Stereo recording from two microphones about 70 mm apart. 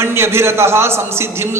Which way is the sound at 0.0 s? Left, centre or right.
Right.